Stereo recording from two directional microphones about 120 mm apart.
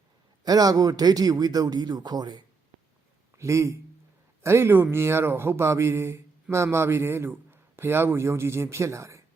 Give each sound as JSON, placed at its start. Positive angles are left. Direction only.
{"t": 0.4, "sound": "a man's voice", "side_deg": -30}
{"t": 3.3, "sound": "a man's voice", "side_deg": -25}